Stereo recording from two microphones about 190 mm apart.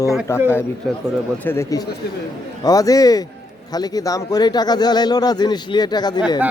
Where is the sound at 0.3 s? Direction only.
15° left (ahead or behind).